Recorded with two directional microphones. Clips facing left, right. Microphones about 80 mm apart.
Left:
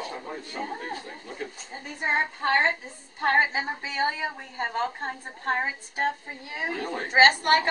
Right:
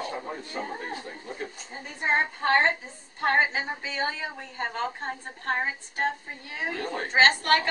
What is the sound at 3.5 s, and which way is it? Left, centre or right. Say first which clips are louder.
A woman's voice: left 1 dB; centre.